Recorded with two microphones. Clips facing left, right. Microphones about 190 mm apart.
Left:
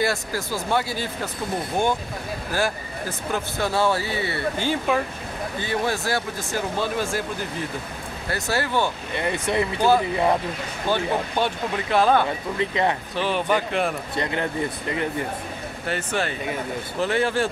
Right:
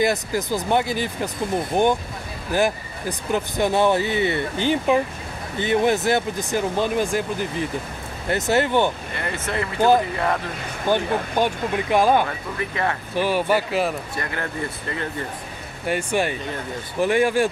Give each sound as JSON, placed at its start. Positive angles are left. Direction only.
{"t": 0.0, "sound": "speech", "side_deg": -20}
{"t": 8.3, "sound": "speech", "side_deg": -20}
{"t": 9.1, "sound": "speech", "side_deg": 15}
{"t": 9.8, "sound": "speech", "side_deg": -15}
{"t": 11.3, "sound": "speech", "side_deg": -15}
{"t": 12.5, "sound": "speech", "side_deg": 20}
{"t": 13.1, "sound": "speech", "side_deg": -10}
{"t": 14.1, "sound": "speech", "side_deg": 20}
{"t": 15.9, "sound": "speech", "side_deg": -15}